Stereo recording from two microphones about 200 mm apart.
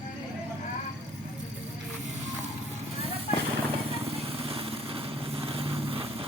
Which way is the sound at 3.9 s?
30° right (ahead or behind).